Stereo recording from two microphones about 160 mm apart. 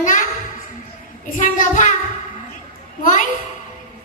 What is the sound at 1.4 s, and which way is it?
Child singing, 50° left (ahead or behind).